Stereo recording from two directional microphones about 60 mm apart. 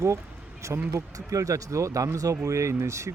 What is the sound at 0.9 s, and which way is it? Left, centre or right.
Speech, right.